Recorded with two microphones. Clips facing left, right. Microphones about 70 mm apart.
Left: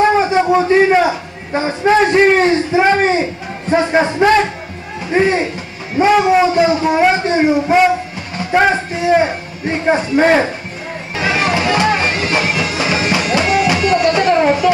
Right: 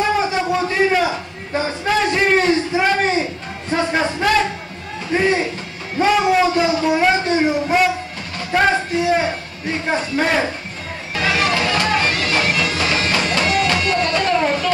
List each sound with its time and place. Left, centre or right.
0.1 s a man's voice: left
5.9 s a man's voice: centre
9.7 s a man's voice: left
11.1 s music: centre